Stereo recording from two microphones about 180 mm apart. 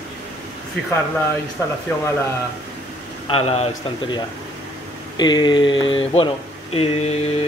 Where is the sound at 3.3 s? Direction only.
35° left (ahead or behind).